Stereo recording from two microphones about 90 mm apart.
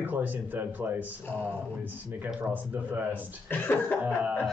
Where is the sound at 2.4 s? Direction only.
20° right (ahead or behind).